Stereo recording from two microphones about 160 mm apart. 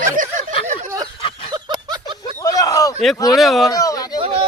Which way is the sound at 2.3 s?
20° left (ahead or behind).